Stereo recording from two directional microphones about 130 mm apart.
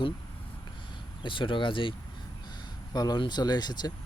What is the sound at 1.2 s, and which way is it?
Speech, 40° left (ahead or behind).